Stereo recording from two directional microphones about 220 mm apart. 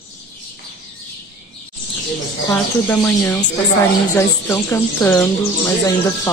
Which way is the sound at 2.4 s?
10° left (ahead or behind).